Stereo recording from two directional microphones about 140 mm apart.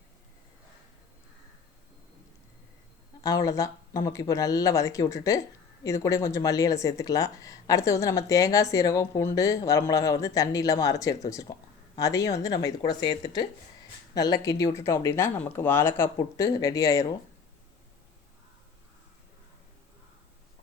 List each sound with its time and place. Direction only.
3.2 s speech: 25° left (ahead or behind)